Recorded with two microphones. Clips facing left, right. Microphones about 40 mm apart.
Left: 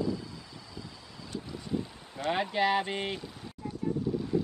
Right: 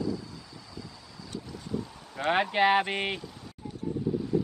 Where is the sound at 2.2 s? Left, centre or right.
Right.